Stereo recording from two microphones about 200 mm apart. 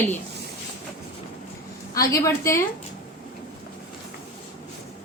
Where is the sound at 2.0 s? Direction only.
15° left (ahead or behind).